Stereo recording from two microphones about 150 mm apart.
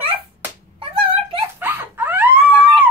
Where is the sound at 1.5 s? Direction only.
15° right (ahead or behind).